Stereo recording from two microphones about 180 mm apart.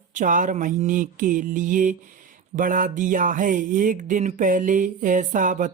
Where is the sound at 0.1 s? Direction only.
45° right (ahead or behind).